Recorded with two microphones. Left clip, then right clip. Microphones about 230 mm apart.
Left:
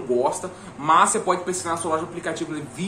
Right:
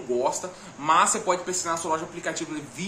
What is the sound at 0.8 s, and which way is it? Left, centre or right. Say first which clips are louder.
A man's voice: left 3 dB; centre.